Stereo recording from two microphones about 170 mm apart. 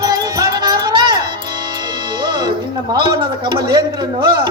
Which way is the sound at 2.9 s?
25° right (ahead or behind).